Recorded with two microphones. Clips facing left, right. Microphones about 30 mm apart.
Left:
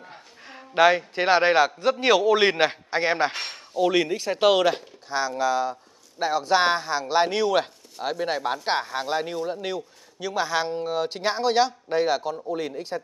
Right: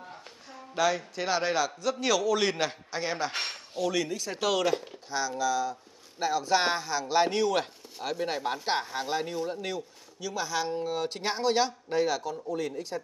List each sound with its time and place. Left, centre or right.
0.5 s a man's voice: left
6.1 s a man's voice: left
7.2 s speech: left
7.6 s a sound: left
8.6 s a man's voice: left